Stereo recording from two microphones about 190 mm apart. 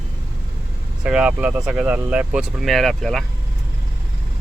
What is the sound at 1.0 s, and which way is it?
Speech, 5° right (ahead or behind).